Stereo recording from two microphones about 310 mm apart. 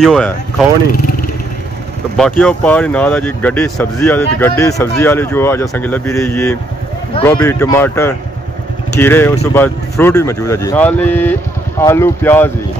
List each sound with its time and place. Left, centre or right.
0.0 s speech: centre
2.1 s speech: centre